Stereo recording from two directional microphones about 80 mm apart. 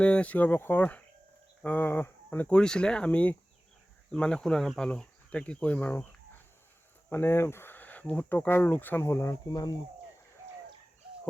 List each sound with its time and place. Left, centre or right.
0.0 s speech: centre
2.5 s speech: centre
7.1 s speech: left
9.5 s speech: left